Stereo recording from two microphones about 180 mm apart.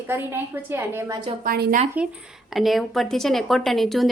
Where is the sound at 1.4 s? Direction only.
60° right (ahead or behind).